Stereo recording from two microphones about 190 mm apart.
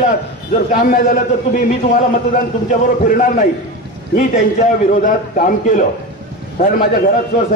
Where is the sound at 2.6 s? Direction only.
45° left (ahead or behind).